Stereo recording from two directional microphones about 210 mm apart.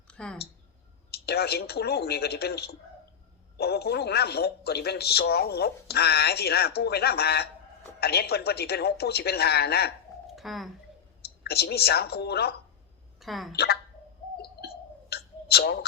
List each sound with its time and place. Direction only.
0.1 s a sound: 5° left (ahead or behind)
1.1 s speech: 50° left (ahead or behind)
10.3 s speech: centre (ahead or behind)
11.4 s speech: 50° left (ahead or behind)
13.1 s speech: centre (ahead or behind)
13.5 s speech: 50° left (ahead or behind)
15.1 s a sound: 50° left (ahead or behind)